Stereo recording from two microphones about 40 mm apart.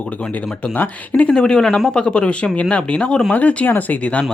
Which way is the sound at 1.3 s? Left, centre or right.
Centre.